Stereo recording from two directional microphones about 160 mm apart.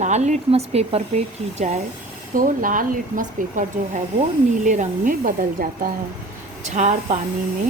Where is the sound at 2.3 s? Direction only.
55° right (ahead or behind).